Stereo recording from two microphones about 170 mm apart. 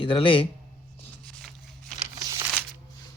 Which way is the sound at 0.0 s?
30° left (ahead or behind).